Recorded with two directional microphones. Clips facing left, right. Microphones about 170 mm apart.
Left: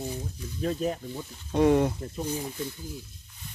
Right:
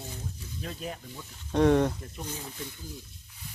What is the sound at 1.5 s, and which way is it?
Speech, 5° left (ahead or behind).